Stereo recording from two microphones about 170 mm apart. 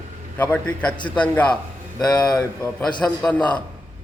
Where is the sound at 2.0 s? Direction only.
25° left (ahead or behind).